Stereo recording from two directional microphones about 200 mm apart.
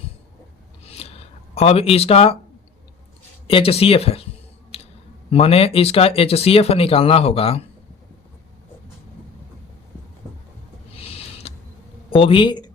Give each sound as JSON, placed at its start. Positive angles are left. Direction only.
{"t": 0.9, "sound": "a sound", "side_deg": 30}
{"t": 3.4, "sound": "speech", "side_deg": 25}
{"t": 4.7, "sound": "a sound", "side_deg": 30}
{"t": 5.3, "sound": "speech", "side_deg": 30}
{"t": 11.4, "sound": "insect", "side_deg": 30}
{"t": 12.1, "sound": "speech", "side_deg": 25}